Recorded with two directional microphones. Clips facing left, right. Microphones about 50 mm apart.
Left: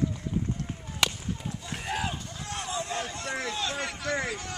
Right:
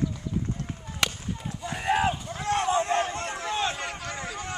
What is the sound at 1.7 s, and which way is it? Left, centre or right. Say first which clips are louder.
Run: right 8 dB; right.